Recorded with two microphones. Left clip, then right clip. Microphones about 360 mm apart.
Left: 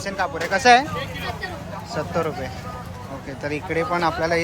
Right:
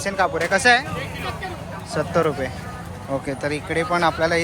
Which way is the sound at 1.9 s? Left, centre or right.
Centre.